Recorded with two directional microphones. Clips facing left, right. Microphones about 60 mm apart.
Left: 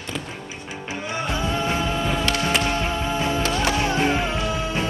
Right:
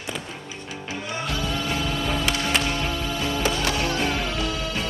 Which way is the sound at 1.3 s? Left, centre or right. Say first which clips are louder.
Left 3 dB; left.